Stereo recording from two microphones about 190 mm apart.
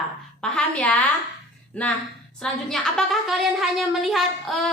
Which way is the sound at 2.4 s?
5° left (ahead or behind).